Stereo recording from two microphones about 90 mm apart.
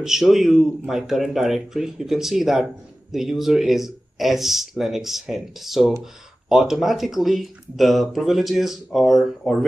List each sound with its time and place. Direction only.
0.0 s speech: 5° right (ahead or behind)